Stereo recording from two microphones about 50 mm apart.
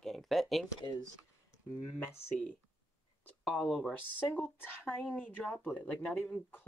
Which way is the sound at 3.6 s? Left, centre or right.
Centre.